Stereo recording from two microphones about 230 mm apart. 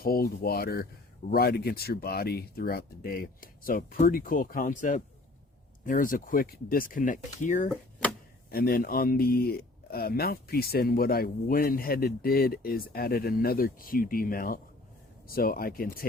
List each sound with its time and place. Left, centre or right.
0.0 s speech: left